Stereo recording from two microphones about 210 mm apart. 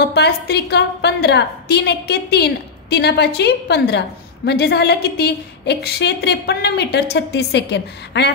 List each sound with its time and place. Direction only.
0.1 s a woman's voice: 50° left (ahead or behind)